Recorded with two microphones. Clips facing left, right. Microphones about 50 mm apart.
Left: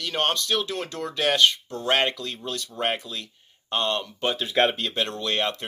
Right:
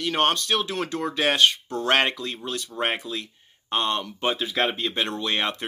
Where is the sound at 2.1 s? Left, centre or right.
Right.